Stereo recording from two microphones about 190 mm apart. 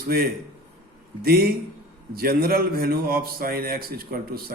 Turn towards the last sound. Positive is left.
turn(degrees=-50)  # may be behind; listen again after turning